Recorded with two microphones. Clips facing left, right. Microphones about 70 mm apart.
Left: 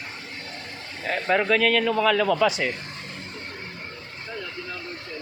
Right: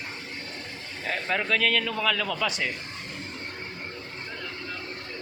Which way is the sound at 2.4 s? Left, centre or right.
Centre.